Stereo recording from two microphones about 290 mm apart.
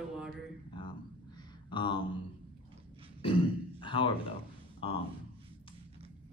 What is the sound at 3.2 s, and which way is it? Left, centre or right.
Throat clearing, centre.